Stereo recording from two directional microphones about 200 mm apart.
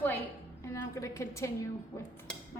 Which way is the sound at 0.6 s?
15° left (ahead or behind).